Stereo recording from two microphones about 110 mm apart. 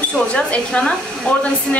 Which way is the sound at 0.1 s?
10° left (ahead or behind).